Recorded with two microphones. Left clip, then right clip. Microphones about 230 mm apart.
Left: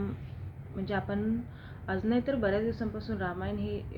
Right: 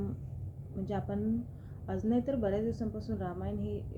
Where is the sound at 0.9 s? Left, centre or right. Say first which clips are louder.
Left 3 dB; centre.